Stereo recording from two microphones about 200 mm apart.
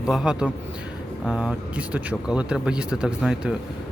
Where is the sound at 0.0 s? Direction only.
5° right (ahead or behind).